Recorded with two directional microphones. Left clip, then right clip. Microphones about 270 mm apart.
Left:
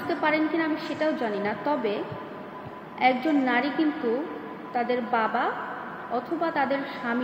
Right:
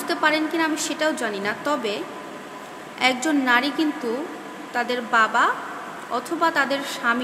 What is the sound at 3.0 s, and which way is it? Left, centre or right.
A woman's voice, centre.